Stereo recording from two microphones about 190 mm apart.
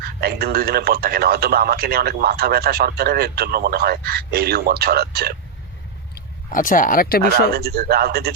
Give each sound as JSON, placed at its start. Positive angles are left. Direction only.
{"t": 0.0, "sound": "a man's voice", "side_deg": -55}
{"t": 6.1, "sound": "speech", "side_deg": 45}
{"t": 7.2, "sound": "a man's voice", "side_deg": -55}